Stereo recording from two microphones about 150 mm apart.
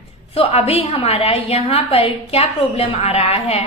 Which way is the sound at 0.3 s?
45° left (ahead or behind).